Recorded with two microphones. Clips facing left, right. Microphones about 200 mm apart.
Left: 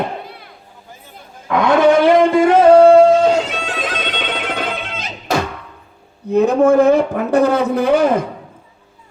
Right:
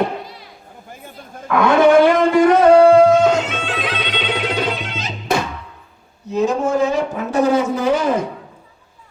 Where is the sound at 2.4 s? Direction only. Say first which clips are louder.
Left 1 dB; 30° left (ahead or behind); by 5.1 s 55° left (ahead or behind).